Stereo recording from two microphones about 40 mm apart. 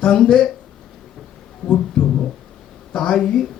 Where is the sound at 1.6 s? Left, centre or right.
Centre.